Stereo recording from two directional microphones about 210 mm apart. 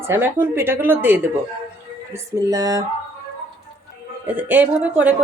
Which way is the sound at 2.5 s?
15° right (ahead or behind).